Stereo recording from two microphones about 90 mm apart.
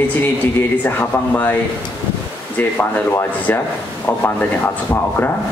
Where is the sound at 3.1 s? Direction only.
25° left (ahead or behind).